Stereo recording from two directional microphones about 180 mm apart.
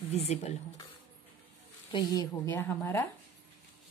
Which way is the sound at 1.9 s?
20° left (ahead or behind).